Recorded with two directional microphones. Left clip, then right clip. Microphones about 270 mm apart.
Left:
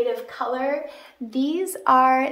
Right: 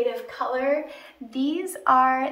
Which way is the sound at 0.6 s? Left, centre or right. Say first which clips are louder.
Right 1 dB; left.